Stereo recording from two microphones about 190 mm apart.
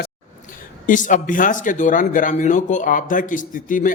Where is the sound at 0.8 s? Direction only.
45° left (ahead or behind).